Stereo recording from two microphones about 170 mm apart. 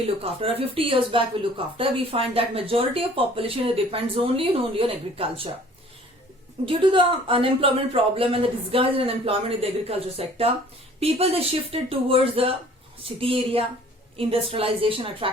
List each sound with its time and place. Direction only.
0.2 s a woman's voice: 35° right (ahead or behind)
6.7 s a woman's voice: 30° right (ahead or behind)